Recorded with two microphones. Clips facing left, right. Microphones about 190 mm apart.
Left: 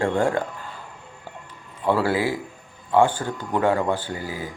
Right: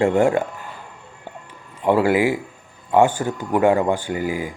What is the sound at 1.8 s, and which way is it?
Speech, 15° right (ahead or behind).